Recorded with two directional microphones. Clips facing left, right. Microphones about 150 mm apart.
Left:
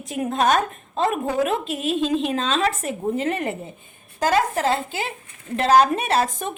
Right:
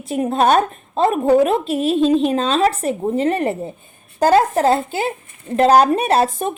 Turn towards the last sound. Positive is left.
turn(degrees=-35)  # may be behind; listen again after turning